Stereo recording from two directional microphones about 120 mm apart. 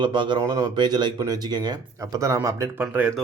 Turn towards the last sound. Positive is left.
turn(degrees=-10)  # may be behind; listen again after turning